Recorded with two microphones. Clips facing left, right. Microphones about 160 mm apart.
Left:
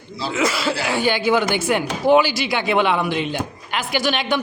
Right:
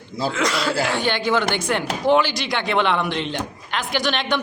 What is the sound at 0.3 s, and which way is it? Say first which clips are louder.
A man's voice: left 2 dB; 5° left (ahead or behind).